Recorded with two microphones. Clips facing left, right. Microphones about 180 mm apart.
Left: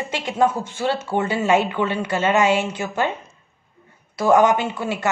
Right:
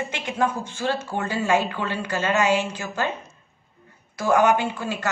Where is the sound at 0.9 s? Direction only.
20° left (ahead or behind).